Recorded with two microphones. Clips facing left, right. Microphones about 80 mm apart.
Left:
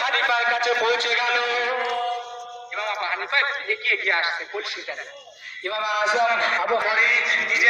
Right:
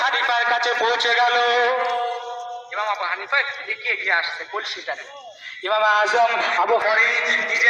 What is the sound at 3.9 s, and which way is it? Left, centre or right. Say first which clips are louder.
Speech: right 2 dB; right.